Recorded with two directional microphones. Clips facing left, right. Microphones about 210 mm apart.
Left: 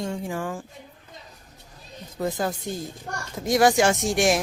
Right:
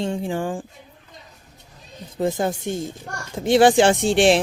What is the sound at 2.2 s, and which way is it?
A woman's voice, 25° right (ahead or behind).